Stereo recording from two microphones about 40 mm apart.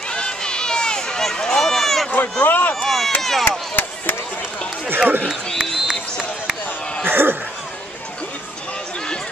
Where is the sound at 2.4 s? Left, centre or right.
Left.